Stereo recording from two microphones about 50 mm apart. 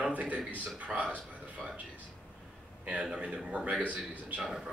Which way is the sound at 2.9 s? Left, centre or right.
Centre.